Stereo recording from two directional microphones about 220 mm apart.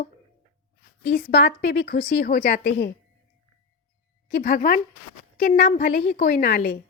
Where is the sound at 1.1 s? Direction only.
40° left (ahead or behind).